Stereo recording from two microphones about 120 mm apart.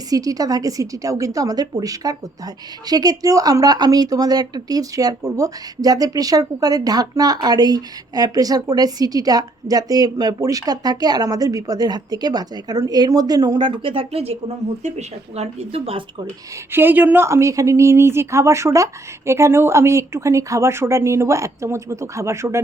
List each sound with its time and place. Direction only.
0.1 s speech: 30° right (ahead or behind); by 16.0 s 50° right (ahead or behind)
16.7 s speech: 15° right (ahead or behind)